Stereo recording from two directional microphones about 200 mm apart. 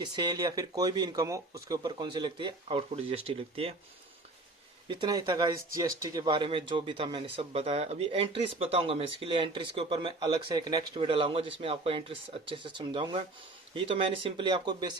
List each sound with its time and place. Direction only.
0.0 s speech: 20° right (ahead or behind)
4.9 s speech: 20° right (ahead or behind)